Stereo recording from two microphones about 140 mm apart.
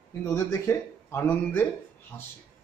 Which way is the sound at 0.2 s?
20° left (ahead or behind).